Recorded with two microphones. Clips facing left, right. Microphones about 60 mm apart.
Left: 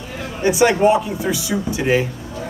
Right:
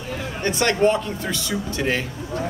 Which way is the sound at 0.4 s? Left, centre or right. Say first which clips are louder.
Left 5 dB; centre.